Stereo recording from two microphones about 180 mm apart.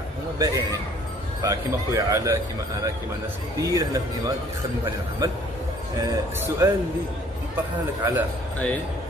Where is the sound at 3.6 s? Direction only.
20° right (ahead or behind).